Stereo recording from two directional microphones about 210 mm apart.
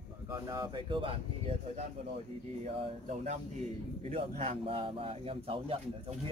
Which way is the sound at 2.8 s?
30° right (ahead or behind).